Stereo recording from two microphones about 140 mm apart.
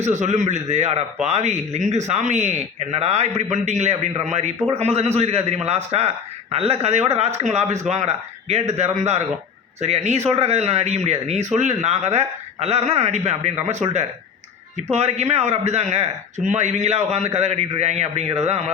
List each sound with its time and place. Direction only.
0.0 s a man's voice: 55° right (ahead or behind)